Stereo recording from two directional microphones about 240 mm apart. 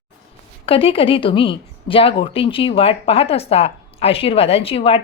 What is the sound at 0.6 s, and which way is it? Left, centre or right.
A woman's voice, left.